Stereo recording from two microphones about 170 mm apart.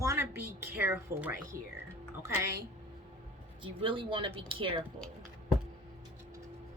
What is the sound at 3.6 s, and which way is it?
Speech, 30° right (ahead or behind).